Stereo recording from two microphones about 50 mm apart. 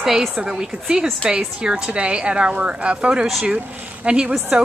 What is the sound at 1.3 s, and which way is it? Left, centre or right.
Speech, centre.